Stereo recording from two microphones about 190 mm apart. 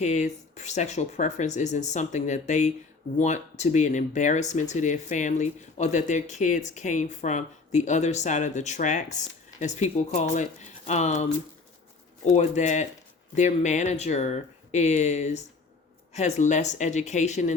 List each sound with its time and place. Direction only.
0.0 s speech: 40° left (ahead or behind)